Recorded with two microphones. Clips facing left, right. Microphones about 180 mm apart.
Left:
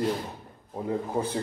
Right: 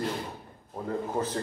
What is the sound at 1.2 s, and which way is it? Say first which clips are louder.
Speech: left 1 dB; 10° left (ahead or behind).